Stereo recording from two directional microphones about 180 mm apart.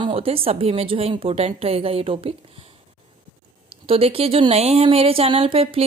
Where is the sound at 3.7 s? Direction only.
30° right (ahead or behind).